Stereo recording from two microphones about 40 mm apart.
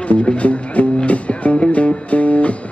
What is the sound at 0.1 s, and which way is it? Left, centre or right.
Music, left.